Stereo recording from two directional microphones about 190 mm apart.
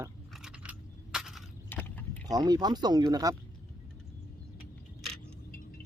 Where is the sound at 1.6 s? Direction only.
10° left (ahead or behind).